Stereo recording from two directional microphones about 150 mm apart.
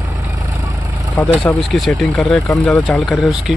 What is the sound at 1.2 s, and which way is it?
A man's voice, 5° left (ahead or behind).